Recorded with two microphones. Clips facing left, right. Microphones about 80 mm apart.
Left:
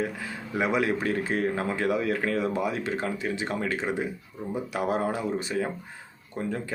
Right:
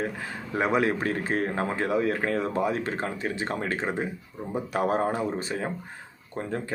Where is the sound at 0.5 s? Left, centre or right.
Right.